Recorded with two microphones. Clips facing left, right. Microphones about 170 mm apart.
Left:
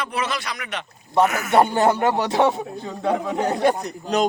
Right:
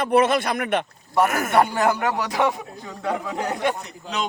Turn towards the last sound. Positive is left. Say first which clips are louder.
# left 7 dB
turn(degrees=40)  # may be behind; listen again after turning